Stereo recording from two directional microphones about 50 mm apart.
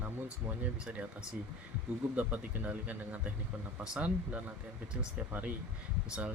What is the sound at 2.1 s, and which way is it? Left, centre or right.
Speech, right.